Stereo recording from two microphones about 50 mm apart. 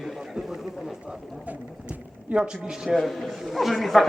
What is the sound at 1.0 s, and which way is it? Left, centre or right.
Speech, right.